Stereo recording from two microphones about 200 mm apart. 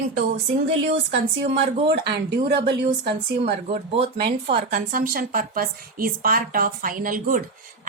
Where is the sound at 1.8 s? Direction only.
55° right (ahead or behind).